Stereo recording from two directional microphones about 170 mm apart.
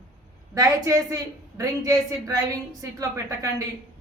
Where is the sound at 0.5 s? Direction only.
20° right (ahead or behind).